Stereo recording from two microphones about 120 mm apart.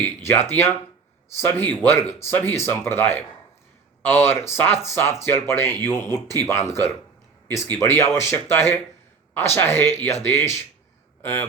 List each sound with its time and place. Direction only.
0.0 s a man's voice: 20° left (ahead or behind)